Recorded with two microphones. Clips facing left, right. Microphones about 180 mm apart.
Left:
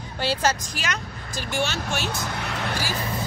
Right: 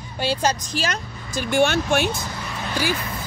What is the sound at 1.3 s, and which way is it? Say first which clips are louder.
Speech: right 8 dB; 55° right (ahead or behind).